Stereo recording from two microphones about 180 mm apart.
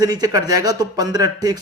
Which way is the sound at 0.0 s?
20° right (ahead or behind).